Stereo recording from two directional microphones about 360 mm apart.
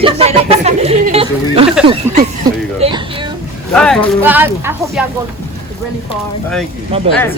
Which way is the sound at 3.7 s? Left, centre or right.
Centre.